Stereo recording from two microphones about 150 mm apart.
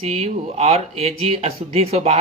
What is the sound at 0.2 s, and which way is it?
Speech, 45° right (ahead or behind).